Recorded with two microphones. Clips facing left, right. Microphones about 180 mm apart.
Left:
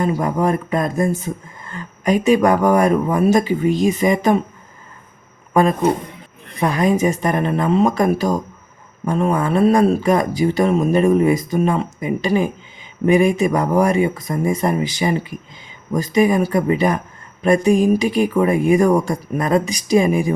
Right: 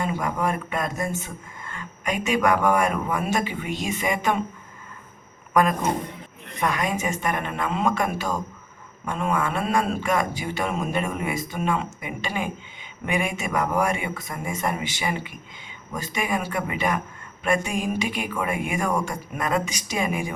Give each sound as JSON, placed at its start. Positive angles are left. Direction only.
{"t": 0.0, "sound": "speech", "side_deg": 35}
{"t": 5.5, "sound": "speech", "side_deg": 30}